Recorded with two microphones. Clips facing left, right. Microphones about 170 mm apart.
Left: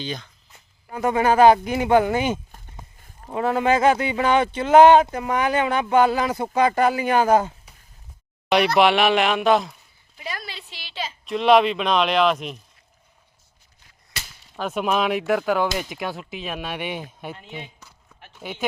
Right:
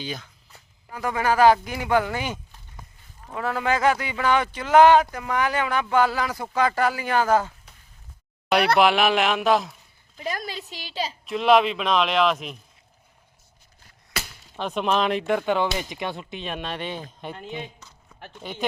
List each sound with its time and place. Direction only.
0.0 s speech: 5° right (ahead or behind)
0.9 s speech: 25° left (ahead or behind)
8.8 s speech: centre (ahead or behind)
10.2 s a woman's voice: 45° right (ahead or behind)
11.3 s speech: centre (ahead or behind)
14.5 s speech: 5° left (ahead or behind)